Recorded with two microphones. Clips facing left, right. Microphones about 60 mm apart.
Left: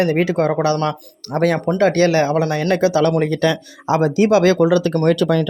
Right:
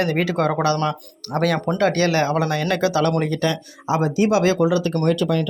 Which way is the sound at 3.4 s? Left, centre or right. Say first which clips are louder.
Left 4 dB; left.